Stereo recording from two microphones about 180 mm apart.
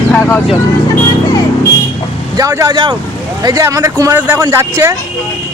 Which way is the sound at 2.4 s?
20° right (ahead or behind).